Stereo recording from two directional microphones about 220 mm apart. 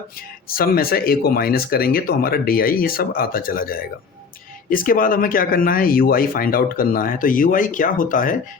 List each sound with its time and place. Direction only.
0.4 s speech: 40° left (ahead or behind)